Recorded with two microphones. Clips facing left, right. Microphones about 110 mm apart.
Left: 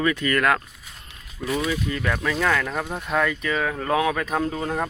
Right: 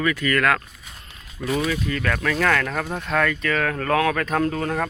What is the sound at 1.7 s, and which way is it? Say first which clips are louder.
Speech: right 1 dB; 15° left (ahead or behind).